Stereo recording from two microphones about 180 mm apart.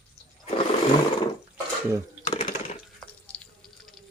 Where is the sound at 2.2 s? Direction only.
35° left (ahead or behind).